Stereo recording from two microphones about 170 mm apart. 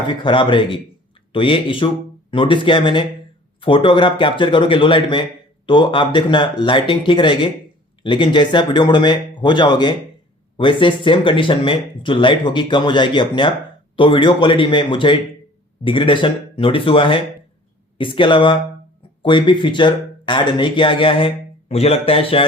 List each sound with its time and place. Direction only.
0.1 s speech: 30° left (ahead or behind)